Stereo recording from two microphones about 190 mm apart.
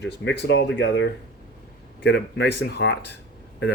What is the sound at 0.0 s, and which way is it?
Speech, 65° left (ahead or behind).